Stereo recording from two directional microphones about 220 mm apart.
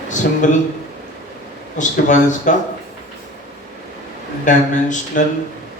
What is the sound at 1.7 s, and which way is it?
Speech, 35° left (ahead or behind).